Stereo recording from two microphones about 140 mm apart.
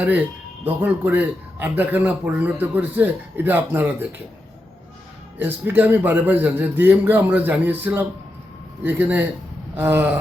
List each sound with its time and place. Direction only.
0.6 s a man's voice: 15° right (ahead or behind)
5.4 s a man's voice: 15° right (ahead or behind)